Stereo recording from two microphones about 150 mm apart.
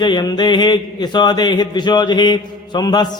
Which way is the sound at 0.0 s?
30° left (ahead or behind).